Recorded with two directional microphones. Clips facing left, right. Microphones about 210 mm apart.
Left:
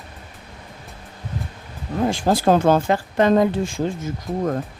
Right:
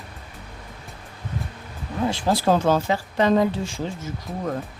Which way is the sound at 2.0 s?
50° left (ahead or behind).